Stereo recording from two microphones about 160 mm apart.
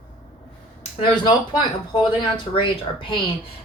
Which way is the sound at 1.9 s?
30° left (ahead or behind).